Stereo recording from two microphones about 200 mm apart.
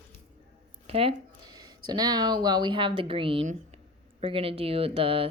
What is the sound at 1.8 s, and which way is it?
Speech, 20° right (ahead or behind).